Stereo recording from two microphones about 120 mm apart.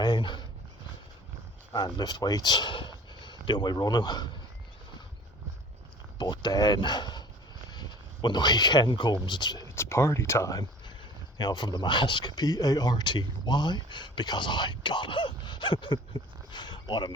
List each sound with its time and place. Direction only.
0.0 s a sound: 40° left (ahead or behind)
1.7 s speech: 35° left (ahead or behind)
6.1 s speech: 35° left (ahead or behind)
9.7 s speech: 20° left (ahead or behind); by 17.1 s 40° left (ahead or behind)